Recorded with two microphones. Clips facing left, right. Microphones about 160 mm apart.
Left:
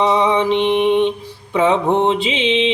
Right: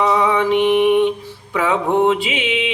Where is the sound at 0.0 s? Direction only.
20° left (ahead or behind).